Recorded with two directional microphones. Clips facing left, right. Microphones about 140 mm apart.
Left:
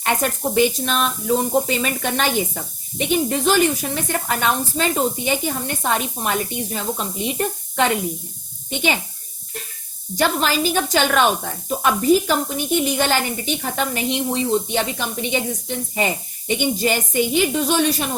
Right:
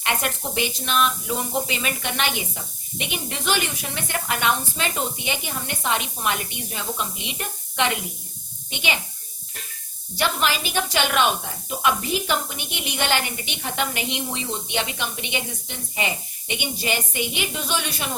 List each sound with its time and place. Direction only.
0.0 s a woman's voice: 40° left (ahead or behind)
10.2 s a woman's voice: 40° left (ahead or behind)